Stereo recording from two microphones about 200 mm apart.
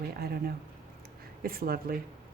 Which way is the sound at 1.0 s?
50° right (ahead or behind).